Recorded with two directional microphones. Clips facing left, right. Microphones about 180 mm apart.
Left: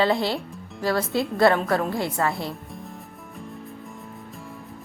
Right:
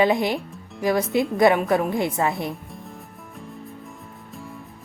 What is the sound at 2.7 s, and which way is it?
Music, centre (ahead or behind).